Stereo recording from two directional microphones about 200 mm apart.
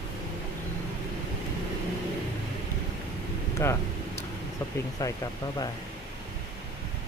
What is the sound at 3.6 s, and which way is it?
Speech, 15° left (ahead or behind).